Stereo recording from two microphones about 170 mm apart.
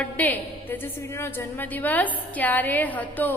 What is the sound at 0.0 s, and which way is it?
A woman's voice, 10° left (ahead or behind).